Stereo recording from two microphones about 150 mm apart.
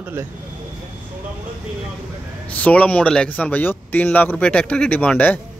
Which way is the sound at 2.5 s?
10° left (ahead or behind).